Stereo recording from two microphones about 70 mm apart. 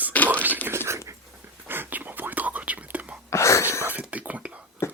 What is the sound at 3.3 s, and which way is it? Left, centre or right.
Whispering, left.